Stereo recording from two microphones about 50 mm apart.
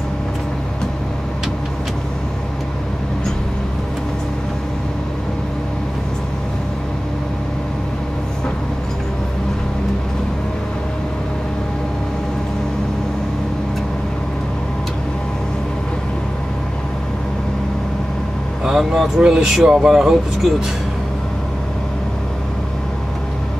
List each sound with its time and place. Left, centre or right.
18.7 s vehicle: centre
19.3 s speech: centre